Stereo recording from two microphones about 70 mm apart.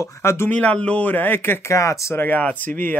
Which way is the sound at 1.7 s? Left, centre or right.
Left.